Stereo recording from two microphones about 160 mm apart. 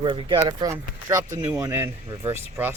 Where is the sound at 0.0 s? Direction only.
30° right (ahead or behind).